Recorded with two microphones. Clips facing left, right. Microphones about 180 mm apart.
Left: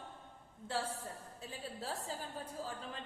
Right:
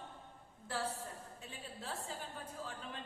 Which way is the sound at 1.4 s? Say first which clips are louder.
Left 4 dB; 35° left (ahead or behind).